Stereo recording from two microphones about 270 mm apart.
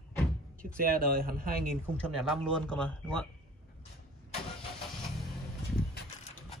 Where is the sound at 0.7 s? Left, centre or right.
Right.